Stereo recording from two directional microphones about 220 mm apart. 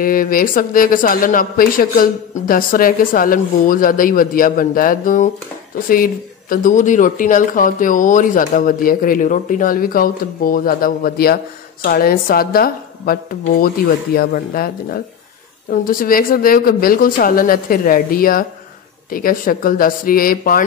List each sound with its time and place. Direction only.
0.0 s speech: 40° left (ahead or behind)
6.5 s speech: 35° left (ahead or behind)